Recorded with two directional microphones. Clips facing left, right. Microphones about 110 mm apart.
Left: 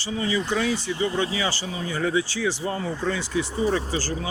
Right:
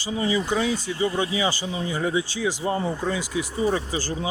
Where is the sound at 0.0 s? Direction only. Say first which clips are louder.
Right 1 dB; 15° right (ahead or behind).